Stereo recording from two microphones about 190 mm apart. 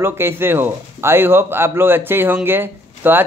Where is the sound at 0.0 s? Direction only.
10° right (ahead or behind).